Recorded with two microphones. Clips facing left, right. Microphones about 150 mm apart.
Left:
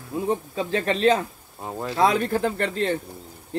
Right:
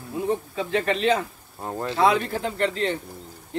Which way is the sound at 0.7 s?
35° left (ahead or behind).